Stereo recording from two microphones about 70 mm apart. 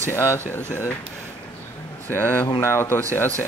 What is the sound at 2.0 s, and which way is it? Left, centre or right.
Speech, left.